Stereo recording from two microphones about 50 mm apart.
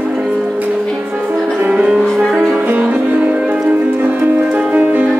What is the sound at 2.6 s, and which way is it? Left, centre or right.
Music, right.